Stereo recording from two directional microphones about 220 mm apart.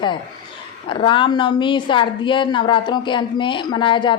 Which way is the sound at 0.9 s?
25° left (ahead or behind).